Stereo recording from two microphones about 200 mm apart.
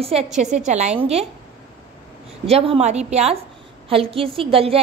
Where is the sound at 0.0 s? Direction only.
30° right (ahead or behind).